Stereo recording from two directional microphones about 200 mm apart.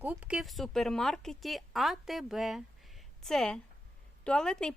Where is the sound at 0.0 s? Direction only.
5° right (ahead or behind).